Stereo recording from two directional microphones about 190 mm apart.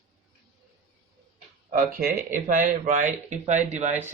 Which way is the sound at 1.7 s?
50° right (ahead or behind).